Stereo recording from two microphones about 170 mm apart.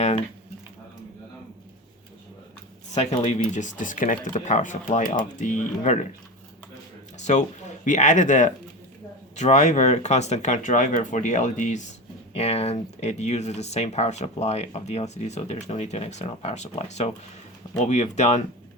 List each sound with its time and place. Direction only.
2.9 s speech: 40° left (ahead or behind)
7.2 s speech: 45° left (ahead or behind)